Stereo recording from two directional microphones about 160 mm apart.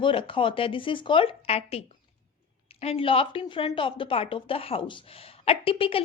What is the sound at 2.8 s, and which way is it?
A woman's voice, 35° left (ahead or behind).